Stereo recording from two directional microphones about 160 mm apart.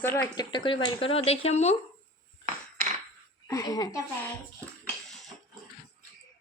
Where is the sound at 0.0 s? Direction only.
10° left (ahead or behind).